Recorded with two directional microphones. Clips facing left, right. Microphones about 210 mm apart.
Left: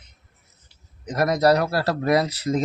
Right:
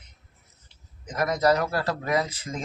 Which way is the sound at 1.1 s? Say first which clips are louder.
Left 4 dB; 35° left (ahead or behind).